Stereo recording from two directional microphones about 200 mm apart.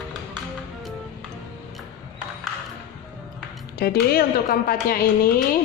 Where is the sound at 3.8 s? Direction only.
50° left (ahead or behind).